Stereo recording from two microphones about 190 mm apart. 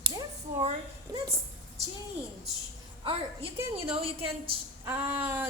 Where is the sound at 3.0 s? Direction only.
30° right (ahead or behind).